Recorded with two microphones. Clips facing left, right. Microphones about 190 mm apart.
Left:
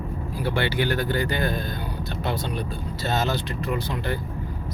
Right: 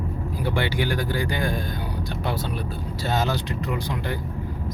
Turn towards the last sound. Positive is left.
turn(degrees=-15)  # may be behind; listen again after turning